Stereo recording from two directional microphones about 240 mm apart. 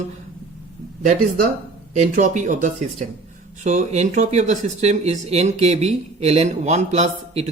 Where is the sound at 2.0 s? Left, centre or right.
Right.